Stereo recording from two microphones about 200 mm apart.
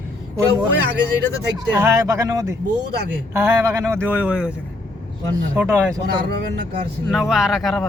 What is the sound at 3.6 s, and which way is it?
Speech, 15° right (ahead or behind).